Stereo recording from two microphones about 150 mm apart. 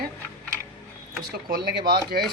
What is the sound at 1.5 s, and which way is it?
Speech, 85° right.